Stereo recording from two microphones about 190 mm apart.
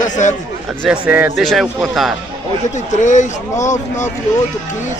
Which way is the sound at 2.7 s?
40° left (ahead or behind).